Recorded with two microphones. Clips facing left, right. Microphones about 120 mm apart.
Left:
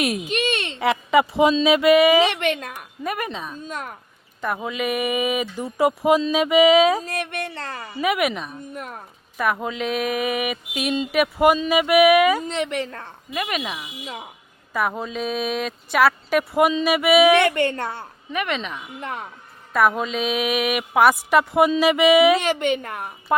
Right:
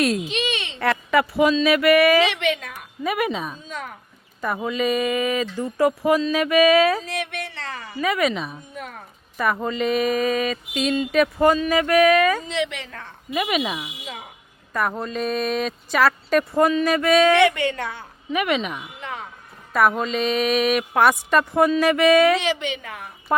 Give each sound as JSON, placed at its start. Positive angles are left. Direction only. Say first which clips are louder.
{"t": 0.0, "sound": "speech", "louder": "right 3 dB", "side_deg": 15}
{"t": 0.3, "sound": "a sound", "louder": "left 3 dB", "side_deg": 50}
{"t": 0.8, "sound": "speech", "louder": "left 2 dB", "side_deg": 15}
{"t": 2.2, "sound": "speech", "louder": "left 1 dB", "side_deg": 45}
{"t": 3.0, "sound": "speech", "louder": "right 4 dB", "side_deg": -5}
{"t": 7.0, "sound": "speech", "louder": "left 1 dB", "side_deg": 45}
{"t": 7.9, "sound": "speech", "louder": "even", "side_deg": 15}
{"t": 9.4, "sound": "speech", "louder": "right 1 dB", "side_deg": 5}
{"t": 12.5, "sound": "speech", "louder": "left 1 dB", "side_deg": 45}
{"t": 13.3, "sound": "speech", "louder": "right 4 dB", "side_deg": 0}
{"t": 17.5, "sound": "speech", "louder": "left 2 dB", "side_deg": 45}
{"t": 18.3, "sound": "speech", "louder": "right 4 dB", "side_deg": -5}
{"t": 22.4, "sound": "speech", "louder": "left 3 dB", "side_deg": 50}